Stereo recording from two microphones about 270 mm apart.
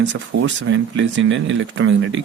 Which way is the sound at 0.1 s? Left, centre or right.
Right.